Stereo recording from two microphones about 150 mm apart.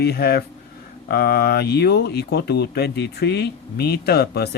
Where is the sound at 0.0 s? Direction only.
90° left.